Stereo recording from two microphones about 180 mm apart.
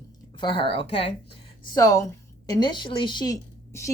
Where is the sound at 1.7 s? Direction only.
20° left (ahead or behind).